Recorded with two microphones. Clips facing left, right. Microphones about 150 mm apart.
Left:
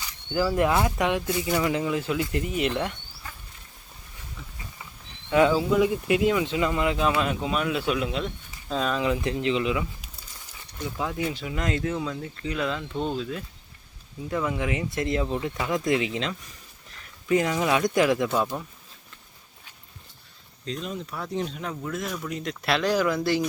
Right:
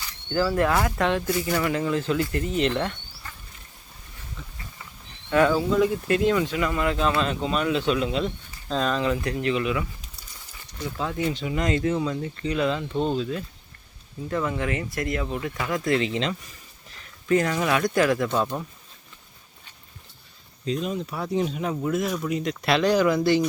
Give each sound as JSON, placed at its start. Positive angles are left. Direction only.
{"t": 0.3, "sound": "speech", "side_deg": 15}
{"t": 5.3, "sound": "speech", "side_deg": 15}
{"t": 6.4, "sound": "speech", "side_deg": 20}
{"t": 10.9, "sound": "speech", "side_deg": 10}
{"t": 18.3, "sound": "speech", "side_deg": 5}
{"t": 20.7, "sound": "speech", "side_deg": -5}